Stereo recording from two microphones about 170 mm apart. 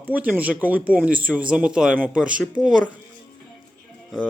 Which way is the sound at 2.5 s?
50° right (ahead or behind).